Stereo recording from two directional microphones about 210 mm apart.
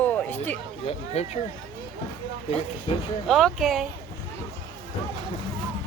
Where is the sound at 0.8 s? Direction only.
30° left (ahead or behind).